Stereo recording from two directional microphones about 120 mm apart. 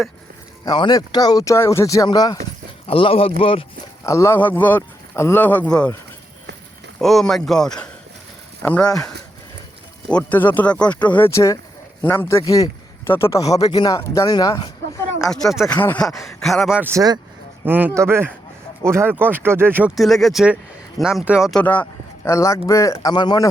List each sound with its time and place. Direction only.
0.6 s speech: 35° left (ahead or behind)
2.8 s speech: 50° left (ahead or behind)
4.0 s speech: 25° left (ahead or behind)
4.4 s speech: 15° left (ahead or behind)
7.0 s a man's voice: centre (ahead or behind); by 12.4 s 20° left (ahead or behind)
12.5 s speech: 30° left (ahead or behind)
15.2 s a man's voice: 5° left (ahead or behind)
15.7 s speech: 15° left (ahead or behind)
16.0 s a man's voice: centre (ahead or behind)
17.7 s speech: 15° right (ahead or behind)
20.0 s a man's voice: centre (ahead or behind)
21.5 s speech: 10° left (ahead or behind)
22.3 s speech: 25° left (ahead or behind)